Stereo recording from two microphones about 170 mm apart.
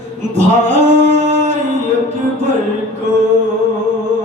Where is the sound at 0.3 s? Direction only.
45° right (ahead or behind).